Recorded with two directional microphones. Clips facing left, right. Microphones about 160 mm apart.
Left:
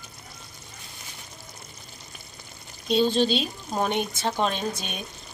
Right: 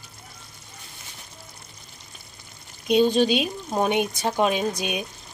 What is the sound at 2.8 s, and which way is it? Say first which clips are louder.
Speech: right 3 dB; 10° right (ahead or behind).